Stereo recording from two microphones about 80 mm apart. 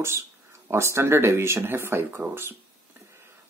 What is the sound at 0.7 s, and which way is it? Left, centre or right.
Speech, right.